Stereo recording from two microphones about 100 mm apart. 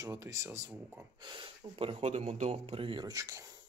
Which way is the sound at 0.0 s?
30° right (ahead or behind).